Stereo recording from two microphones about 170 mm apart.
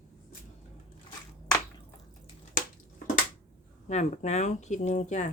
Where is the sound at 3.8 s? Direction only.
40° left (ahead or behind).